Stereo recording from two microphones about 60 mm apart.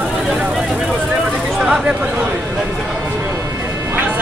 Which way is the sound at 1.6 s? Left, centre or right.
Centre.